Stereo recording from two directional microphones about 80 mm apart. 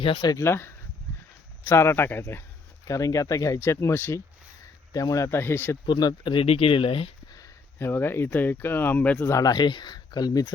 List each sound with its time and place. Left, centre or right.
0.0 s speech: left
0.3 s speech: left
2.8 s speech: left
5.8 s speech: left
7.8 s speech: left
9.3 s speech: left